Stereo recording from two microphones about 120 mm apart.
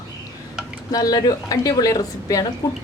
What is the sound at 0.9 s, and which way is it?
A woman's voice, 30° left (ahead or behind).